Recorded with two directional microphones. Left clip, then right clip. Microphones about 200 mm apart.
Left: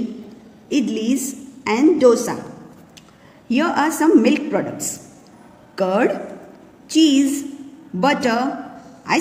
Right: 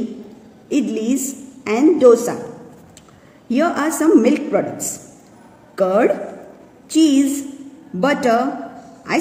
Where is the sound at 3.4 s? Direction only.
15° left (ahead or behind).